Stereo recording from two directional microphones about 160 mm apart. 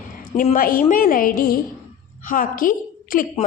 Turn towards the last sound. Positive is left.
turn(degrees=60)  # may be behind; listen again after turning